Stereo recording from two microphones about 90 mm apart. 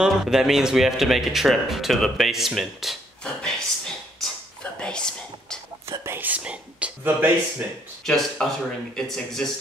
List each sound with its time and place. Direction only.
0.0 s speech: 5° right (ahead or behind)
3.4 s a sound: 5° left (ahead or behind)
5.9 s whispering: 25° right (ahead or behind)
8.0 s speech: 5° left (ahead or behind)